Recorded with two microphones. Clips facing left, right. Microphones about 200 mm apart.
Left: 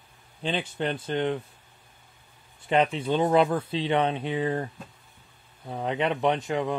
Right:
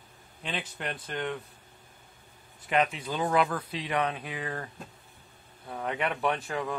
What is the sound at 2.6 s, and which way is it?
Speech, 30° left (ahead or behind).